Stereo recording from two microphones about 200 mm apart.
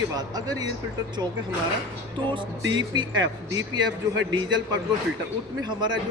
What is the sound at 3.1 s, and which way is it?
Speech, 75° right (ahead or behind).